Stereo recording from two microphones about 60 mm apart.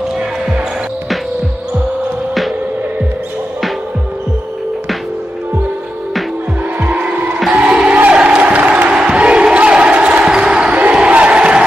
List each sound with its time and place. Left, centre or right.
6.8 s music: right
7.5 s crowd: right